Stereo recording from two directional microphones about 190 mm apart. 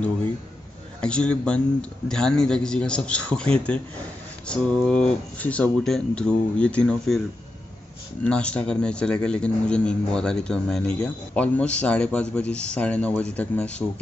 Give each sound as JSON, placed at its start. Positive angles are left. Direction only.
{"t": 1.0, "sound": "speech", "side_deg": 5}
{"t": 8.2, "sound": "speech", "side_deg": 5}